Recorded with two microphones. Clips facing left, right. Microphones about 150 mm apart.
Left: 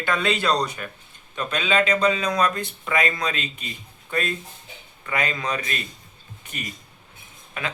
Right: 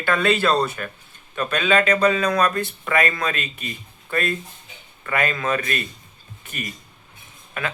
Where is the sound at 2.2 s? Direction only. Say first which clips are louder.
Right 3 dB; 60° right (ahead or behind).